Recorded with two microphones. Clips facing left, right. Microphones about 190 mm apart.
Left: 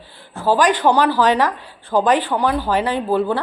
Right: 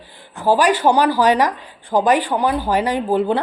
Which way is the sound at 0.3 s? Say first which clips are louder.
Right 1 dB; 10° right (ahead or behind).